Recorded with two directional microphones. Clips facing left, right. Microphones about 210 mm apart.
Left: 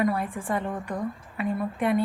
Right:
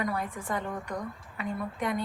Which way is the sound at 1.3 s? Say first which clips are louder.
Left 5 dB; 25° left (ahead or behind).